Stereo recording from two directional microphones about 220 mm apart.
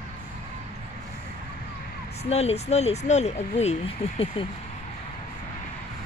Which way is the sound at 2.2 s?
30° left (ahead or behind).